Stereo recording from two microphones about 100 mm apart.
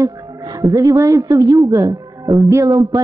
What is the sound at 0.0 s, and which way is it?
A man's voice, 40° right (ahead or behind).